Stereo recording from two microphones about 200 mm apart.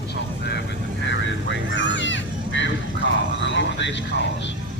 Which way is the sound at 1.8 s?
65° left (ahead or behind).